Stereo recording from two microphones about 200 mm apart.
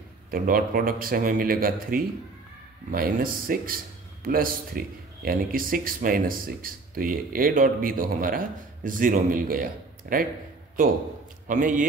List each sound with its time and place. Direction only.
0.3 s a man's voice: 45° right (ahead or behind)
11.4 s a man's voice: 40° right (ahead or behind)